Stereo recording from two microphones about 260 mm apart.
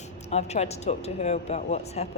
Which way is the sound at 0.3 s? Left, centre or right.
Left.